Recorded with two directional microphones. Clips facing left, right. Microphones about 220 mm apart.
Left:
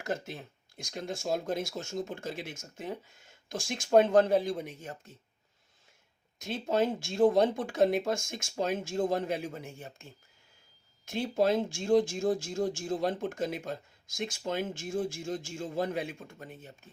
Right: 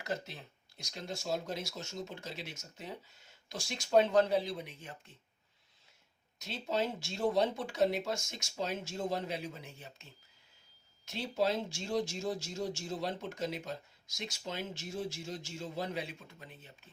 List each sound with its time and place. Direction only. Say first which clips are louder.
0.0 s speech: left 4 dB; 50° left (ahead or behind)
6.4 s speech: left 6 dB; 50° left (ahead or behind)